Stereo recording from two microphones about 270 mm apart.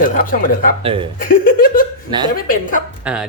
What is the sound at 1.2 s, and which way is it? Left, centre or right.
Speech, left.